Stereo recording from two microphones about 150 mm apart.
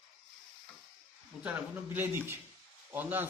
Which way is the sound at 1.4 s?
15° right (ahead or behind).